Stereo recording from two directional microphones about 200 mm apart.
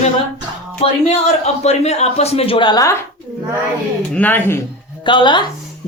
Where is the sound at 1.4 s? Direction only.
35° left (ahead or behind).